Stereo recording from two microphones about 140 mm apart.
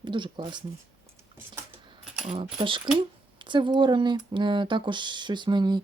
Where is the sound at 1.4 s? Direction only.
15° right (ahead or behind).